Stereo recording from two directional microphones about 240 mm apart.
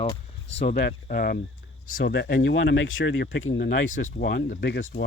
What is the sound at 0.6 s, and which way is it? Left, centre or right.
Speech, left.